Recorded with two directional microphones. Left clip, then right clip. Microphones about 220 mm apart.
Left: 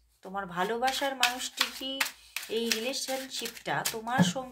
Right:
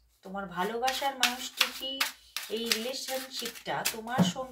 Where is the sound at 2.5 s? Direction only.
45° left (ahead or behind).